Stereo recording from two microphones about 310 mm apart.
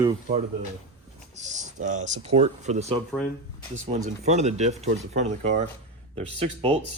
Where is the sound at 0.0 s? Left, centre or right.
Centre.